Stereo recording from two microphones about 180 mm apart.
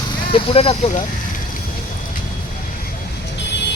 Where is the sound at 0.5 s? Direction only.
35° left (ahead or behind).